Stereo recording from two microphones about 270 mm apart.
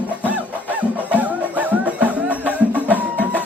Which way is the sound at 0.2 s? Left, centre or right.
Centre.